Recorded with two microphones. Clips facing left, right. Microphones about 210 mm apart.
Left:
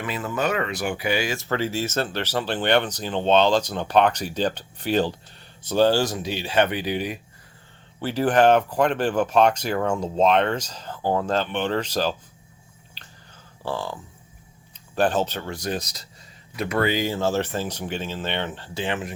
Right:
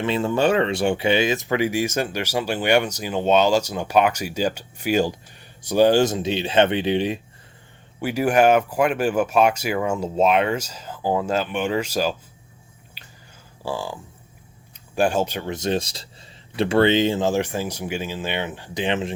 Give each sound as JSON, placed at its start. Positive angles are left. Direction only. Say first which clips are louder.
{"t": 0.0, "sound": "speech", "louder": "right 6 dB", "side_deg": -25}
{"t": 8.0, "sound": "speech", "louder": "right 1 dB", "side_deg": -10}
{"t": 13.7, "sound": "speech", "louder": "right 1 dB", "side_deg": -10}